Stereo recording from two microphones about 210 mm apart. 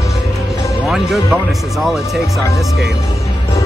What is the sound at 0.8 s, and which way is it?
Music, centre (ahead or behind).